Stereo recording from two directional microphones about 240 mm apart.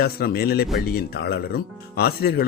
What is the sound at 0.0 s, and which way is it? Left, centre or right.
Speech, left.